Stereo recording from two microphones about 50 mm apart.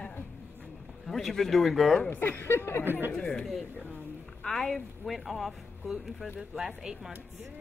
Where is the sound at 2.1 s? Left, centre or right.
Left.